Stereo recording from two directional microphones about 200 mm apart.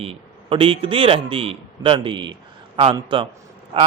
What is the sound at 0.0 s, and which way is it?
A man's voice, 30° right (ahead or behind).